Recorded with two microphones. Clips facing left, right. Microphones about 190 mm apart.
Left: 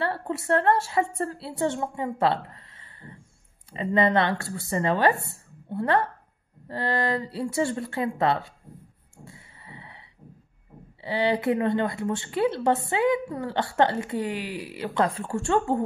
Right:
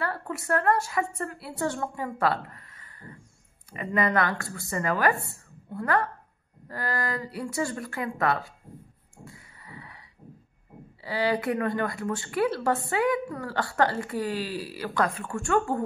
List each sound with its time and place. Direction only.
0.0 s a woman's voice: 25° left (ahead or behind)
9.2 s a sound: 20° left (ahead or behind)
11.0 s a woman's voice: 20° left (ahead or behind)